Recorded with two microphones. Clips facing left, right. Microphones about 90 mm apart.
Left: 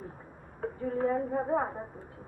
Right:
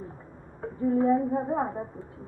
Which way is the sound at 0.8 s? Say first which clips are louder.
Right 7 dB; 25° right (ahead or behind).